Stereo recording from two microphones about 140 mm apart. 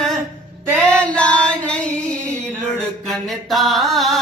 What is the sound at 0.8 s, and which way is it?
Singing, 10° left (ahead or behind).